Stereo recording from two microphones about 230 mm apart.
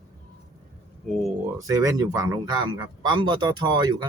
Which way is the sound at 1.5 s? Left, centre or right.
Centre.